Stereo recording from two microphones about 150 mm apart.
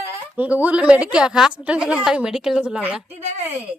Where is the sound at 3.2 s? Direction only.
45° right (ahead or behind).